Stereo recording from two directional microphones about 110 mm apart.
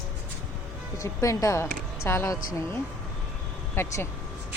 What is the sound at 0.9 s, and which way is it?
A woman's voice, 30° left (ahead or behind).